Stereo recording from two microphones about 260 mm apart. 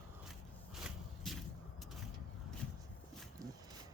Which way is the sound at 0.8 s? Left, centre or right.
Centre.